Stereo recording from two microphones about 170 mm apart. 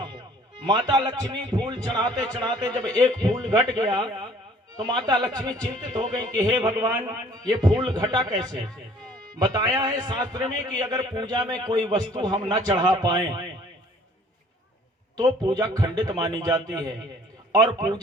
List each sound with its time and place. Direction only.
0.7 s a man's voice: 25° right (ahead or behind)
15.1 s a man's voice: 25° right (ahead or behind)